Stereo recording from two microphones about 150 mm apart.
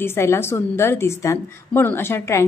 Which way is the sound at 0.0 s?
15° left (ahead or behind).